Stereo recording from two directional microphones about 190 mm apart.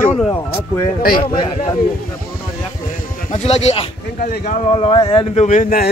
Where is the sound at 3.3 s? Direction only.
35° left (ahead or behind).